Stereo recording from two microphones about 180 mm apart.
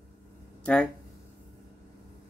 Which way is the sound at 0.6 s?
5° left (ahead or behind).